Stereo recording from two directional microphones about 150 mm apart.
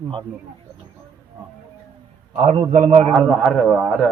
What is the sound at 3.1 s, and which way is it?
Speech, centre (ahead or behind).